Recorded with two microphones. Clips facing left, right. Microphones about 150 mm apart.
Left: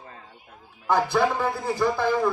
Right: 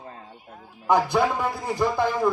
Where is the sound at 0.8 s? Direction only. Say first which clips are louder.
Right 1 dB; 15° right (ahead or behind).